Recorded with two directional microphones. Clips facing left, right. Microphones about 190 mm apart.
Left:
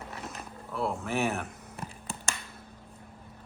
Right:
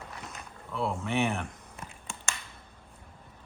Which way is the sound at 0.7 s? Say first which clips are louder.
Even; centre (ahead or behind).